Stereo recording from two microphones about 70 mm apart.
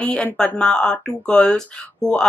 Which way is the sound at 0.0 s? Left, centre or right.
Centre.